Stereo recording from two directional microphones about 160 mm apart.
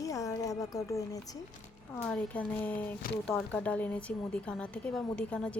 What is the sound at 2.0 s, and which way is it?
Speech, 5° left (ahead or behind).